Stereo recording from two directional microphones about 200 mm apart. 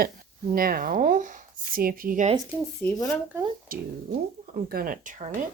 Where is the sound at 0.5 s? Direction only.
45° right (ahead or behind).